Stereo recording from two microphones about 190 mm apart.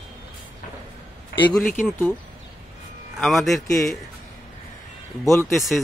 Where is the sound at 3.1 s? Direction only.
Centre (ahead or behind).